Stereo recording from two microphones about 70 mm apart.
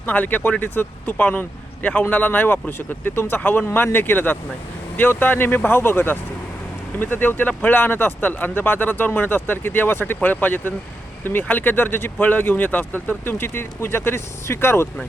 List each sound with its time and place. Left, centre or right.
0.0 s speech: left